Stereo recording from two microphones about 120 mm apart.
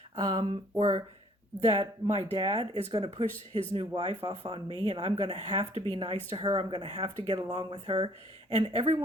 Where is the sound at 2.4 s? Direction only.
55° right (ahead or behind).